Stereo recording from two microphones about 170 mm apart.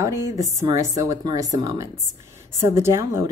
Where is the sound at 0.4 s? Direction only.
20° right (ahead or behind).